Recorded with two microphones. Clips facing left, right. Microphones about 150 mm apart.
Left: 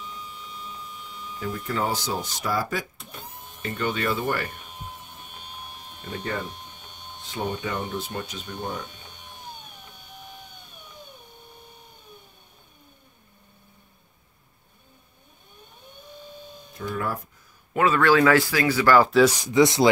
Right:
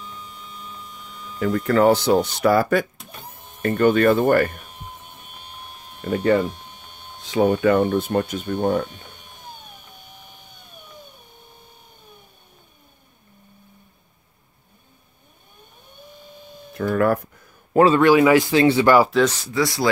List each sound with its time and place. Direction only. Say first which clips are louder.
1.4 s speech: right 11 dB; 65° right (ahead or behind)
3.6 s speech: right 11 dB; 50° right (ahead or behind)
7.4 s speech: right 12 dB; 55° right (ahead or behind)
16.7 s speech: right 10 dB; 65° right (ahead or behind)
17.7 s a man's voice: right 7 dB; 30° right (ahead or behind)
18.0 s speech: right 4 dB; 15° right (ahead or behind)
19.0 s speech: left 1 dB; centre (ahead or behind)
19.3 s speech: left 4 dB; 15° left (ahead or behind)